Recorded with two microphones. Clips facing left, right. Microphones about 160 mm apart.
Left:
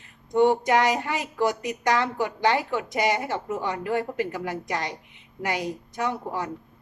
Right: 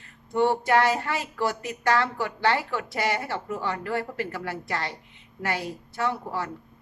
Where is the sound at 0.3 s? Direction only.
15° left (ahead or behind).